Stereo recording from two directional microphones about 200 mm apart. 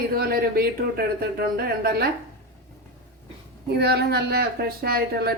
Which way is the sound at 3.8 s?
55° right (ahead or behind).